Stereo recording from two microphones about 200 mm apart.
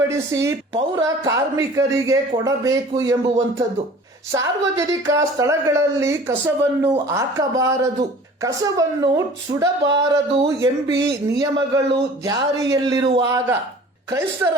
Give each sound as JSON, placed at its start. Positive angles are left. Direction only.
{"t": 0.1, "sound": "a woman's voice", "side_deg": -15}
{"t": 4.3, "sound": "a woman's voice", "side_deg": -15}